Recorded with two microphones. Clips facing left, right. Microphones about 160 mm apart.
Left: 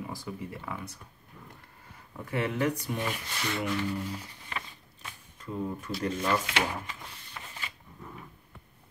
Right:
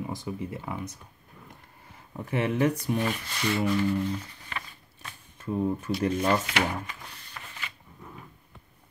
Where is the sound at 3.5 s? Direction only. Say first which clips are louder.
Right 5 dB; 5° right (ahead or behind).